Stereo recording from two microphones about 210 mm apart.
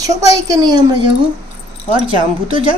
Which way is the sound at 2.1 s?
25° right (ahead or behind).